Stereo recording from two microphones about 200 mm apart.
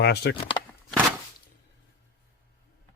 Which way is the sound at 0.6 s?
20° left (ahead or behind).